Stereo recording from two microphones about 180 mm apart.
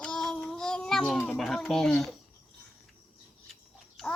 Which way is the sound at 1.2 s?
5° left (ahead or behind).